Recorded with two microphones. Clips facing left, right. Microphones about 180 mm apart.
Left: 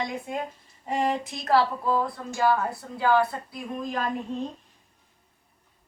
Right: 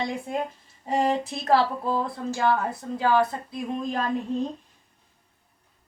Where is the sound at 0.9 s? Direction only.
30° right (ahead or behind).